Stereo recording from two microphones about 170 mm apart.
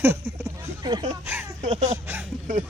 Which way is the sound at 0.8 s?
25° right (ahead or behind).